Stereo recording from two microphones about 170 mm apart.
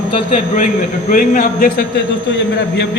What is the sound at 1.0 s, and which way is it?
Speech, 55° left (ahead or behind).